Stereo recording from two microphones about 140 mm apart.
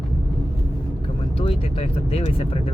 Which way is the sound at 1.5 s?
45° left (ahead or behind).